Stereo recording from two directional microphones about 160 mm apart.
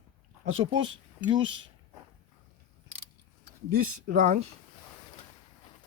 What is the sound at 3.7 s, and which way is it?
Speech, 75° right (ahead or behind).